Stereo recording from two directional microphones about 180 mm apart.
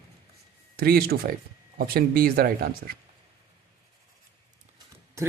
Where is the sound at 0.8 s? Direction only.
55° right (ahead or behind).